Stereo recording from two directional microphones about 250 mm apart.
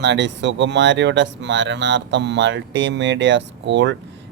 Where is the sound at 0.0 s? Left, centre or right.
Right.